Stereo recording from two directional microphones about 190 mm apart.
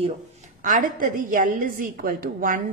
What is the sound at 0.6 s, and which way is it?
A woman's voice, 45° right (ahead or behind).